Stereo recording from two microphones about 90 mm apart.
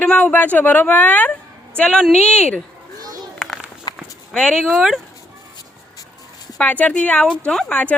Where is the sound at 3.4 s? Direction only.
5° left (ahead or behind).